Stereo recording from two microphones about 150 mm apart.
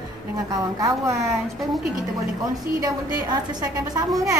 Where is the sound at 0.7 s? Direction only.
20° right (ahead or behind).